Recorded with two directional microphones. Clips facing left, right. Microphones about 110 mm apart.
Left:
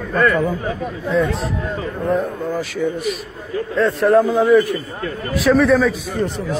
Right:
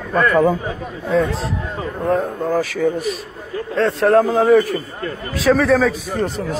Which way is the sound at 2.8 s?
40° right (ahead or behind).